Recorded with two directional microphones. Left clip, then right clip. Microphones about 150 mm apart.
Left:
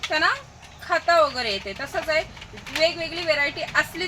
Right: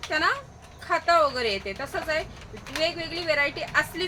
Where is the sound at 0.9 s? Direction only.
15° right (ahead or behind).